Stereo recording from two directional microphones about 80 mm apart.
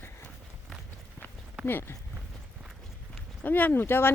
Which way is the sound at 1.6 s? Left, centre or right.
Left.